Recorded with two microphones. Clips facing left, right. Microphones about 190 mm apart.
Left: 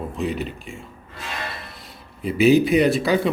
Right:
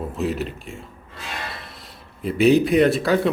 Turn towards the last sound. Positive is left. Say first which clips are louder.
# right 1 dB
turn(degrees=0)  # may be behind; listen again after turning